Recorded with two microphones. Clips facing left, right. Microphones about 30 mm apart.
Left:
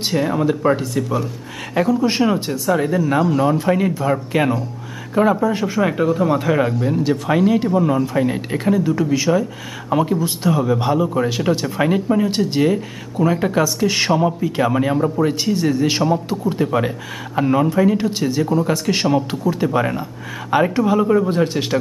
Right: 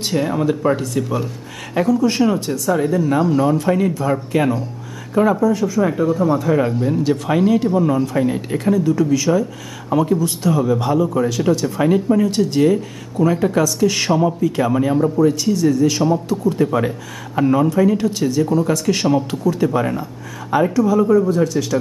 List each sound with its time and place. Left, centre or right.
0.1 s speech: centre
1.0 s speech: centre
2.0 s a man's voice: left
5.4 s speech: left
6.6 s a man's voice: centre
15.1 s a man's voice: left
16.6 s a man's voice: centre
20.5 s speech: left